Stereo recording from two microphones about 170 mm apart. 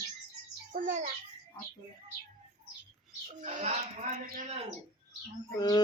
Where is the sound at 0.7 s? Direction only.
50° right (ahead or behind).